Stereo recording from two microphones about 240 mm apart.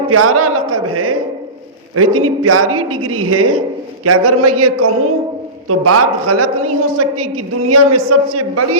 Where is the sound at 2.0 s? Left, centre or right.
Right.